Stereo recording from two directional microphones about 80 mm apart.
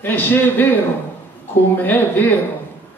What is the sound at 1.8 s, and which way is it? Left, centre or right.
Speech, left.